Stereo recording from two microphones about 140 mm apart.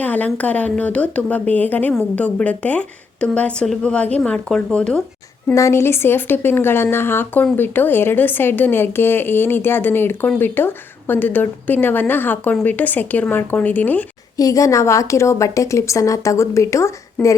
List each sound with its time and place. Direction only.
0.0 s a woman's voice: 10° left (ahead or behind)
5.5 s a woman's voice: 20° left (ahead or behind)
14.3 s a woman's voice: 25° left (ahead or behind)
17.2 s a woman's voice: 10° left (ahead or behind)